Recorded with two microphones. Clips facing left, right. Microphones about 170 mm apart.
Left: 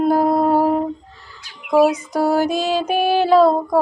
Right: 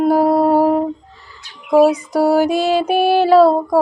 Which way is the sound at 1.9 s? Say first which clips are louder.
Right 4 dB; 10° right (ahead or behind).